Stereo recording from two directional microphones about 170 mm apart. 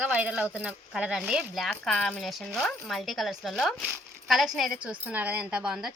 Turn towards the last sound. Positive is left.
turn(degrees=-5)  # may be behind; listen again after turning